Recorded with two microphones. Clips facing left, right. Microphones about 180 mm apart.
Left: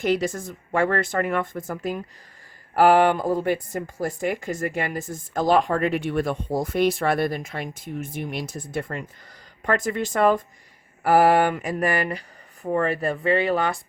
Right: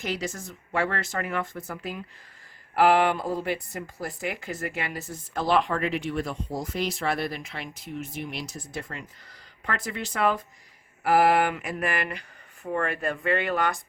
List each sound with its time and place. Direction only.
0.0 s speech: 55° left (ahead or behind)
11.0 s mantra: 40° left (ahead or behind)